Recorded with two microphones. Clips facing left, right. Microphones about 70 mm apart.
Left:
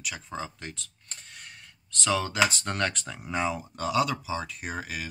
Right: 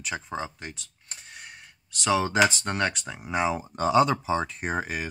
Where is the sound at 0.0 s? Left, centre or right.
Right.